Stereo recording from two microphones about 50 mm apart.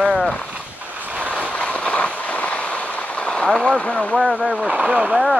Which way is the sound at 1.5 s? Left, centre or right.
Left.